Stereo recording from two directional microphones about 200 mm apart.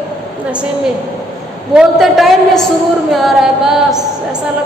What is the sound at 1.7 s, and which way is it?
A woman's voice, centre (ahead or behind).